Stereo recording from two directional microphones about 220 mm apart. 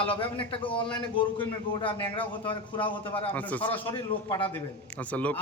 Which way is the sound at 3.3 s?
5° left (ahead or behind).